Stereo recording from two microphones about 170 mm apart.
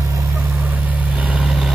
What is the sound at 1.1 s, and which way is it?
Vehicle, 5° right (ahead or behind).